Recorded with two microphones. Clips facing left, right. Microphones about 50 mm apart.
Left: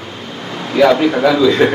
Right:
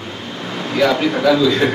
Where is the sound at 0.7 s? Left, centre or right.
Centre.